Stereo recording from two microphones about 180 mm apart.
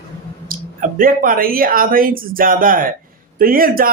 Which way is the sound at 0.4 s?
50° right (ahead or behind).